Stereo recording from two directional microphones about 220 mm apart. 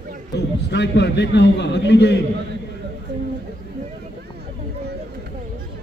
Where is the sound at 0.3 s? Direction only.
50° left (ahead or behind).